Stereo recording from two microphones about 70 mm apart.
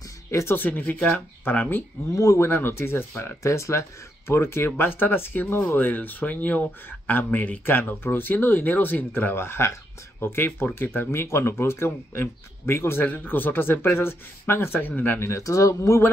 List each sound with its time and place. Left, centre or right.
0.3 s speech: left
0.6 s speech: left
2.1 s speech: left
2.4 s speech: left
15.4 s speech: left